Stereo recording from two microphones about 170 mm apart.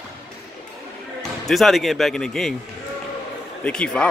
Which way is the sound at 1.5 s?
Centre (ahead or behind).